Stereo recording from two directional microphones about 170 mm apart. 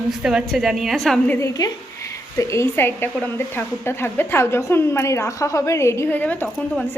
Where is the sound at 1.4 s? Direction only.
20° left (ahead or behind).